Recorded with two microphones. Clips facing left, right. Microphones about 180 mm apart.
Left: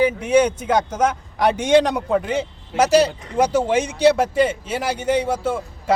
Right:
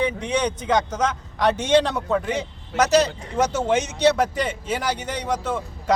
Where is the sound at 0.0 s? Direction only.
5° left (ahead or behind).